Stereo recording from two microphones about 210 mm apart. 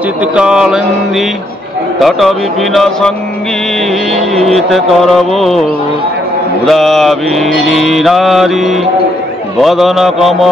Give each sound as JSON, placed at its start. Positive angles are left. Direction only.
{"t": 0.2, "sound": "mantra", "side_deg": -5}
{"t": 4.1, "sound": "mantra", "side_deg": 0}
{"t": 6.6, "sound": "mantra", "side_deg": 0}